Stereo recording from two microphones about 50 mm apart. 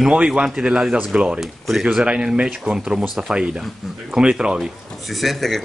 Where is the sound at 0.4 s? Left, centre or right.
Right.